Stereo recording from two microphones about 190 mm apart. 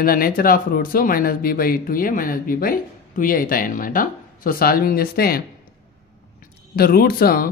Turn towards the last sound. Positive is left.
turn(degrees=50)  # may be behind; listen again after turning